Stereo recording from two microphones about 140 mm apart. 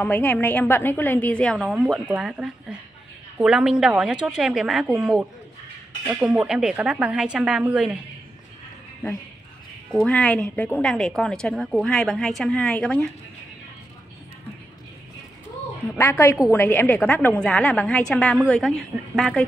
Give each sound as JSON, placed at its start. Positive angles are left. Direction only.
{"t": 0.0, "sound": "a woman's voice", "side_deg": 15}
{"t": 9.9, "sound": "a woman's voice", "side_deg": 10}
{"t": 16.0, "sound": "a woman's voice", "side_deg": 15}